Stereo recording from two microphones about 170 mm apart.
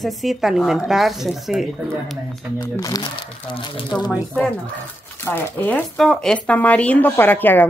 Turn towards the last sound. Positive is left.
turn(degrees=10)  # may be behind; listen again after turning